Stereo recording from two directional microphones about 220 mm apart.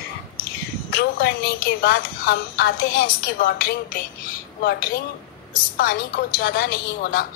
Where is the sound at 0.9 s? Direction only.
45° left (ahead or behind).